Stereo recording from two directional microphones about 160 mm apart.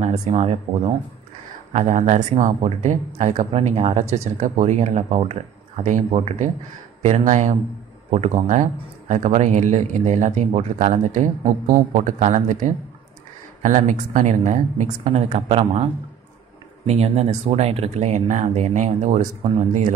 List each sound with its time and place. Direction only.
0.0 s speech: 40° right (ahead or behind)
1.7 s speech: 45° right (ahead or behind)